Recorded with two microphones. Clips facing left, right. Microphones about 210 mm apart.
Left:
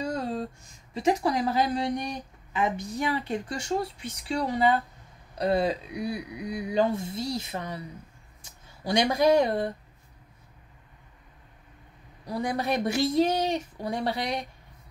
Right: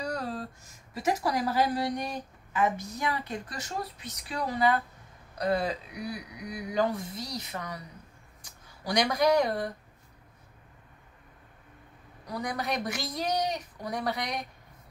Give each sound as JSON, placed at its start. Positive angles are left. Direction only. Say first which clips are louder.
{"t": 0.0, "sound": "a sound", "louder": "left 4 dB", "side_deg": 25}
{"t": 0.9, "sound": "speech", "louder": "left 4 dB", "side_deg": 25}
{"t": 12.3, "sound": "speech", "louder": "left 5 dB", "side_deg": 30}